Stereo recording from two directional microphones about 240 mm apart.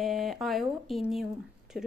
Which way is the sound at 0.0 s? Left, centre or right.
Centre.